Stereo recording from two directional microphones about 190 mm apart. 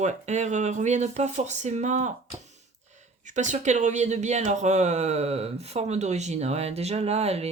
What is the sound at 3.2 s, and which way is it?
Speech, 40° right (ahead or behind).